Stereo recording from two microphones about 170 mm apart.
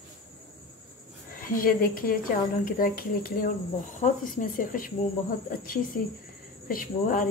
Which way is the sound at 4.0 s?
50° left (ahead or behind).